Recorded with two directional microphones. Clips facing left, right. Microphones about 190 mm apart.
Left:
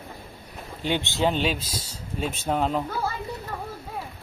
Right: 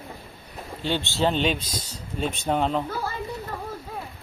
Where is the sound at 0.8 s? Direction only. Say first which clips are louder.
Even; 15° left (ahead or behind).